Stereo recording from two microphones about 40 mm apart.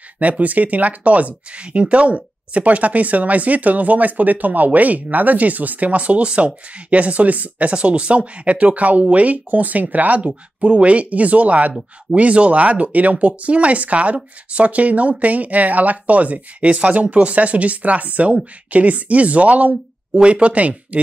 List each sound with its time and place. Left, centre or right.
0.2 s speech: right
7.7 s speech: right